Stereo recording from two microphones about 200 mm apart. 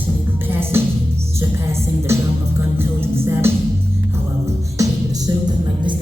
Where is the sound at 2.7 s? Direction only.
10° right (ahead or behind).